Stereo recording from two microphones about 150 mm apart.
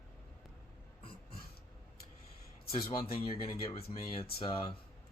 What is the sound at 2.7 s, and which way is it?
Speech, 35° left (ahead or behind).